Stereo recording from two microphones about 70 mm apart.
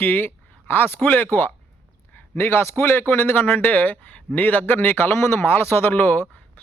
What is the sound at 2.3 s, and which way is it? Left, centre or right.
A man's voice, left.